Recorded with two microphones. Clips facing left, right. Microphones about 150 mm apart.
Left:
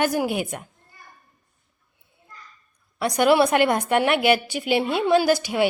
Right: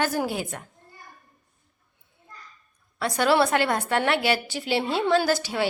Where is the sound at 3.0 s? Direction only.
15° left (ahead or behind).